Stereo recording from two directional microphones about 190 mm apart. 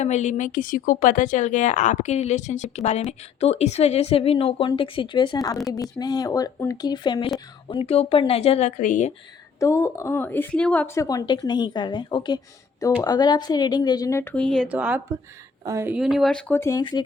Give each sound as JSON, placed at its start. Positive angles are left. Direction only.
{"t": 0.0, "sound": "a woman's voice", "side_deg": 40}
{"t": 9.6, "sound": "a woman's voice", "side_deg": 15}
{"t": 14.7, "sound": "speech", "side_deg": -5}